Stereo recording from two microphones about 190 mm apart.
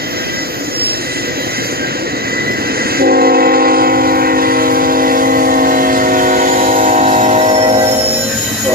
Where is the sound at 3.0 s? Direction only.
55° right (ahead or behind); by 7.8 s 35° right (ahead or behind).